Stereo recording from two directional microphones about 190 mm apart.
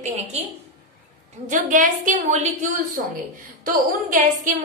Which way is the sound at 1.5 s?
45° right (ahead or behind).